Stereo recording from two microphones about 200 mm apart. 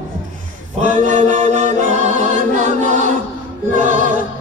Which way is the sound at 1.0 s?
40° right (ahead or behind).